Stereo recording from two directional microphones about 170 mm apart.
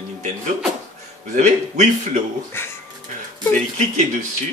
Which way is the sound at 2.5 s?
15° left (ahead or behind).